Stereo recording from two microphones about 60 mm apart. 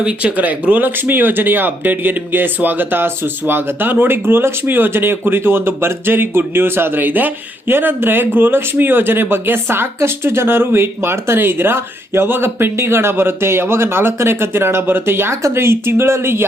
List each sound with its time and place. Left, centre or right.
0.0 s speech: right